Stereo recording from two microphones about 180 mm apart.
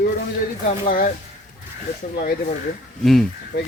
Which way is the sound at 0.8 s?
50° left (ahead or behind).